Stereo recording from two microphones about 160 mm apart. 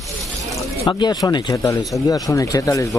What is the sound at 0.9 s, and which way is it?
Speech, 25° left (ahead or behind).